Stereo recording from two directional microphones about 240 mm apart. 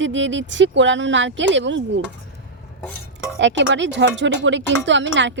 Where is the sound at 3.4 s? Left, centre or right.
Right.